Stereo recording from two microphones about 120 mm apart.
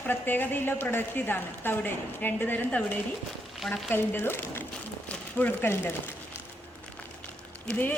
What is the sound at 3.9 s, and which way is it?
Speech, 15° left (ahead or behind).